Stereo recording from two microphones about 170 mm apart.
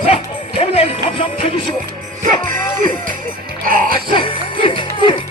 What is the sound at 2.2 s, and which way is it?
Music, 50° right (ahead or behind).